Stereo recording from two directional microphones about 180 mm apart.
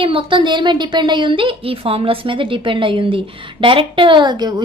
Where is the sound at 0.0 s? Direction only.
30° right (ahead or behind).